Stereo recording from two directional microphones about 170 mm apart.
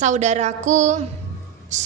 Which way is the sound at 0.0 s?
45° right (ahead or behind).